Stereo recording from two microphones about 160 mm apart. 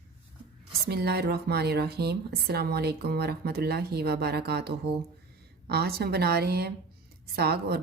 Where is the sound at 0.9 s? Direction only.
90° right.